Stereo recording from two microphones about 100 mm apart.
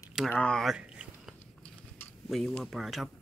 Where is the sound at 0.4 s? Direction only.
5° left (ahead or behind).